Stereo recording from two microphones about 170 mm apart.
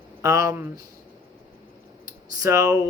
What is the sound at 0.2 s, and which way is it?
Speech, 15° right (ahead or behind).